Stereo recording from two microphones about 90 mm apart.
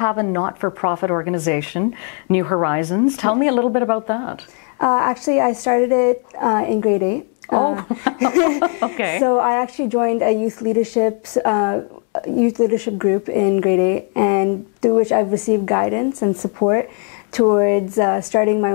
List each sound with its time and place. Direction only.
0.0 s speech: 25° left (ahead or behind)